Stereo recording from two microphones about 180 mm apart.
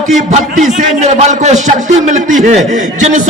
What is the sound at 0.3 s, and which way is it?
A man's voice, 40° right (ahead or behind).